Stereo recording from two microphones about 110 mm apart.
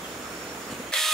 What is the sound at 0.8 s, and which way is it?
Vehicle, 5° left (ahead or behind).